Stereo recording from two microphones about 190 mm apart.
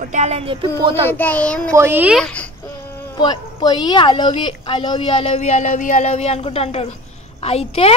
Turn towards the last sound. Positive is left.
turn(degrees=30)  # may be behind; listen again after turning